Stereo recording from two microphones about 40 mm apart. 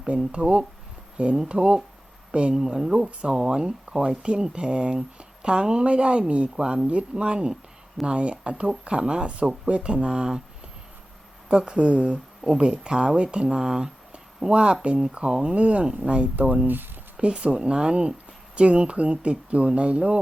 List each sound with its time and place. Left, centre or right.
0.3 s speech: right
2.6 s speech: centre
11.4 s speech: right